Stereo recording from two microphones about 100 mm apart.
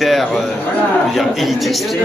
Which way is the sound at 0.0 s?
Centre (ahead or behind).